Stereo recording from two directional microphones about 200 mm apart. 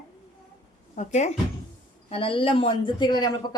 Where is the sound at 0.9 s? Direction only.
35° left (ahead or behind).